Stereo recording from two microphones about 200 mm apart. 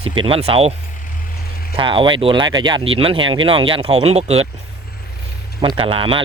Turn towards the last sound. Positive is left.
turn(degrees=-25)  # may be behind; listen again after turning